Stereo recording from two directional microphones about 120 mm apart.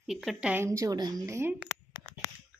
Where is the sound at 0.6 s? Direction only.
25° right (ahead or behind).